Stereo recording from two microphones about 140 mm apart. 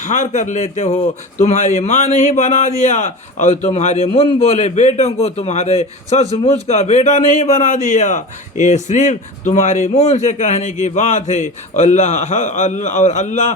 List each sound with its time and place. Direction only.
0.0 s a man's voice: 60° left (ahead or behind)